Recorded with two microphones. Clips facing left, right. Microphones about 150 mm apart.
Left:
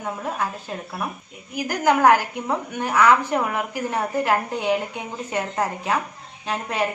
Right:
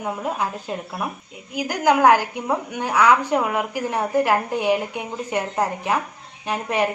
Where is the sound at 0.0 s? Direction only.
15° right (ahead or behind).